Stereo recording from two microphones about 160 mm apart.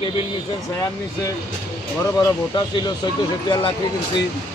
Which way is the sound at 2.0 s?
20° left (ahead or behind).